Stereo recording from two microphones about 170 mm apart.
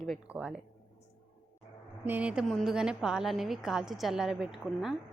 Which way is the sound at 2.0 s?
10° right (ahead or behind).